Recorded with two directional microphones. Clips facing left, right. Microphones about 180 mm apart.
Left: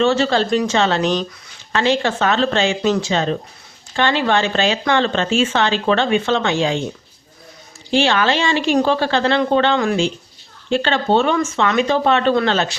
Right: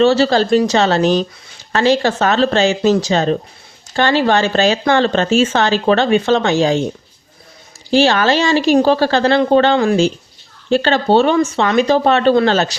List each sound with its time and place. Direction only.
0.0 s speech: 35° right (ahead or behind)
7.9 s speech: 40° right (ahead or behind)